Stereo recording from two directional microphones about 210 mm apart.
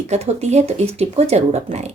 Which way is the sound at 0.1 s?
30° right (ahead or behind).